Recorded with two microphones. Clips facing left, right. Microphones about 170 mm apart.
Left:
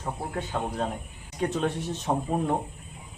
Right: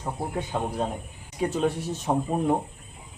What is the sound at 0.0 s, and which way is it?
A man's voice, 15° right (ahead or behind).